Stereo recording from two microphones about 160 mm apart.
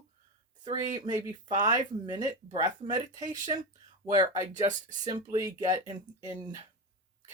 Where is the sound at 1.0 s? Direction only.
25° right (ahead or behind).